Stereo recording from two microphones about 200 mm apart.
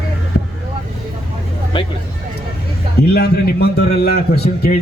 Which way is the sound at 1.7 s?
25° left (ahead or behind).